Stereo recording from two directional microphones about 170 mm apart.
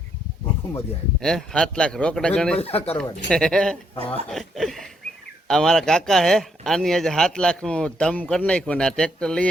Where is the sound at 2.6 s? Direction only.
35° left (ahead or behind).